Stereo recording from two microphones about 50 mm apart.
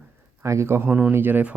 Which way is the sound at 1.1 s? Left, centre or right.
Right.